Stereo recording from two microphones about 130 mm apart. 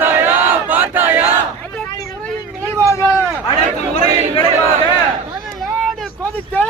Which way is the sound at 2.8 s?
20° left (ahead or behind).